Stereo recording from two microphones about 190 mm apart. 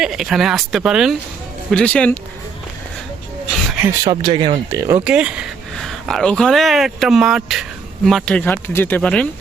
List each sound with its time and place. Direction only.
0.0 s speech: centre (ahead or behind)
3.8 s speech: 20° right (ahead or behind)
4.8 s speech: 15° right (ahead or behind); by 9.2 s 5° left (ahead or behind)